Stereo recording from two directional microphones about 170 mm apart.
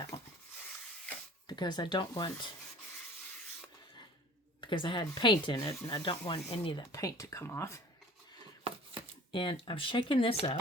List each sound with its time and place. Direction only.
0.1 s a sound: 35° left (ahead or behind)
1.5 s speech: 25° left (ahead or behind)
4.6 s speech: 30° left (ahead or behind)
9.3 s speech: 30° left (ahead or behind)